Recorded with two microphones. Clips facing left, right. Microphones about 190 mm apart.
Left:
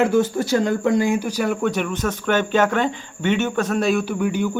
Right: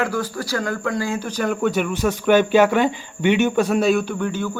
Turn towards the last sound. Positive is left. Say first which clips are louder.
# left 3 dB
turn(degrees=15)  # may be behind; listen again after turning